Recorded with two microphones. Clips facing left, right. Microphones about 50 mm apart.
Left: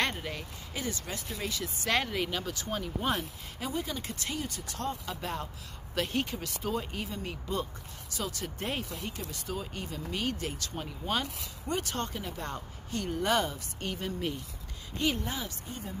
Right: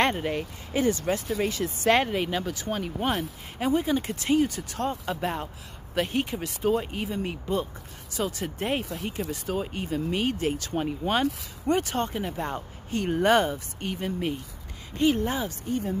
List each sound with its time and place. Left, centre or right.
0.0 s speech: right
2.8 s speech: right
9.5 s speech: right
13.7 s speech: centre
15.2 s speech: right